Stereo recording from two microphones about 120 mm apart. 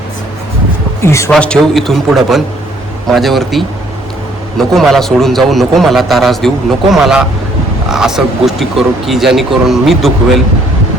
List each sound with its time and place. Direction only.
1.0 s speech: 25° left (ahead or behind)
1.3 s a man's voice: 5° left (ahead or behind)